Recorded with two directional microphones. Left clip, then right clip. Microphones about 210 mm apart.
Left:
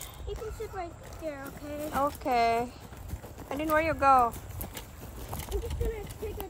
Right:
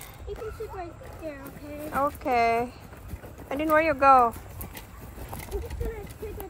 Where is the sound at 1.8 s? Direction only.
5° left (ahead or behind).